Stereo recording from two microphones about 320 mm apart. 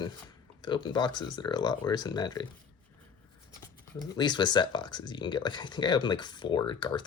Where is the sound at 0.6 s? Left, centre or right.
Centre.